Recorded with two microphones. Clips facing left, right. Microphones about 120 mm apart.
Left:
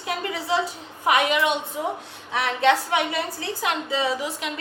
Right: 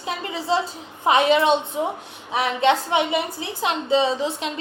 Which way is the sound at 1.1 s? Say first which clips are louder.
Right 4 dB; 25° right (ahead or behind).